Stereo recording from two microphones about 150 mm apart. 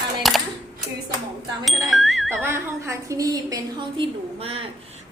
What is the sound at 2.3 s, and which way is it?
A woman's voice, 15° right (ahead or behind).